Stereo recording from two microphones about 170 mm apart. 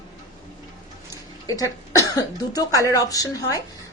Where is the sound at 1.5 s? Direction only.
20° left (ahead or behind).